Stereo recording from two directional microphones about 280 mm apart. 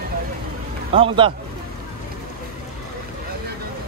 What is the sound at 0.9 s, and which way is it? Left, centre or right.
Speech, centre.